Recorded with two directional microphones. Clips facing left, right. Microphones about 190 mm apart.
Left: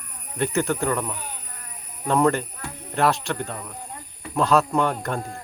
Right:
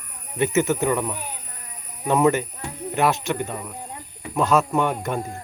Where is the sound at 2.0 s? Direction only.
5° right (ahead or behind).